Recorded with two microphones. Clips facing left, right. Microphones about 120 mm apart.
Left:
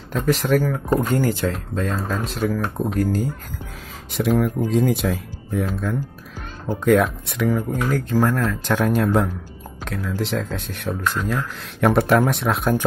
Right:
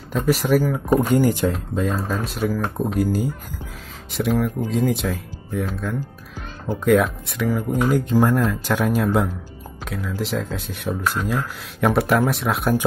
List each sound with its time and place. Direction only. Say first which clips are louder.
0.2 s speech: right 1 dB; 10° right (ahead or behind)
7.9 s speech: right 1 dB; 15° right (ahead or behind)